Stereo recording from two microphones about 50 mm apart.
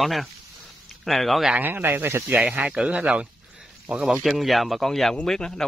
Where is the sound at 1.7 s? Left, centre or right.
Right.